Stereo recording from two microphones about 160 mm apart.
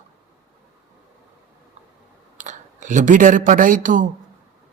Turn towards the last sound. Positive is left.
turn(degrees=-55)  # may be behind; listen again after turning